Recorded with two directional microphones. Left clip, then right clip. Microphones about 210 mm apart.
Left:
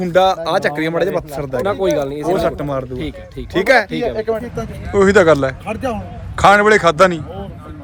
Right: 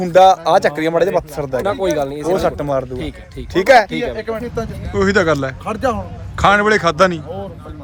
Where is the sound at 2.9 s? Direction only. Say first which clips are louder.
Left 1 dB; 15° left (ahead or behind).